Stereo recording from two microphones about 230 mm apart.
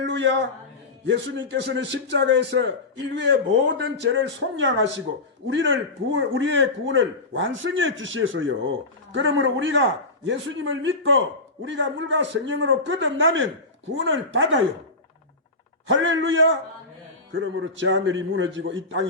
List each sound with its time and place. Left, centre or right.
0.0 s a man's voice: right
15.9 s a man's voice: right